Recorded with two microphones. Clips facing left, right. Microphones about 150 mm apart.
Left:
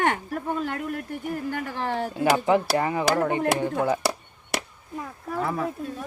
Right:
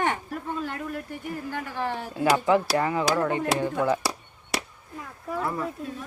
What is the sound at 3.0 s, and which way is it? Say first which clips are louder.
Speech: left 2 dB; 55° left (ahead or behind).